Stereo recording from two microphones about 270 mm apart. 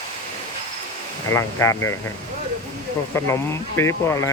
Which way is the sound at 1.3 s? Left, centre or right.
Centre.